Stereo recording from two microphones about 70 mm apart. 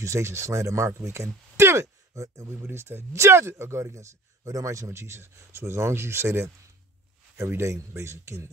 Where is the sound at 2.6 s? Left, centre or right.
Right.